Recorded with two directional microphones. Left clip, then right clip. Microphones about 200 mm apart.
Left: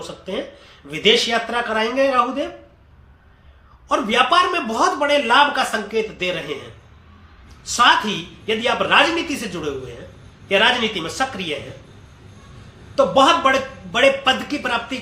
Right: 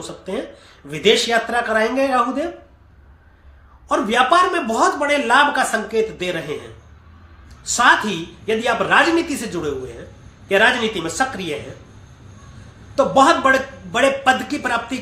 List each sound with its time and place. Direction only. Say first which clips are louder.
0.9 s speech: even; 20° right (ahead or behind)
3.8 s a man's voice: right 1 dB; 20° right (ahead or behind)
7.7 s a man's voice: even; 20° right (ahead or behind)
13.0 s a man's voice: even; 20° right (ahead or behind)